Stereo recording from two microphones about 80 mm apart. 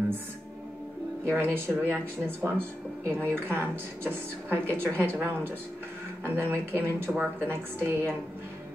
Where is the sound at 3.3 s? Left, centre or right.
Right.